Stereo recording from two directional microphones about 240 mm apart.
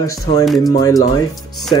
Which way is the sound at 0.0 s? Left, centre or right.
Centre.